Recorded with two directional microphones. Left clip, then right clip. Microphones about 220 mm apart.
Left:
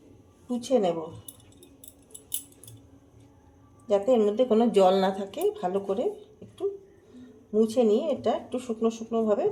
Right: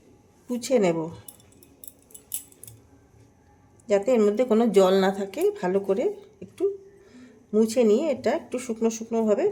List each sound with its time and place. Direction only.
0.4 s speech: 25° right (ahead or behind)
3.8 s speech: 25° right (ahead or behind)
7.5 s speech: 25° right (ahead or behind)